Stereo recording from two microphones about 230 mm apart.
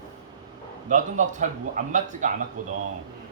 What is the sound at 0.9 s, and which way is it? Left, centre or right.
Speech, right.